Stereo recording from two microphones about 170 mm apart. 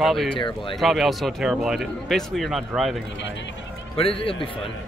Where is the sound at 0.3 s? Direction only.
30° left (ahead or behind).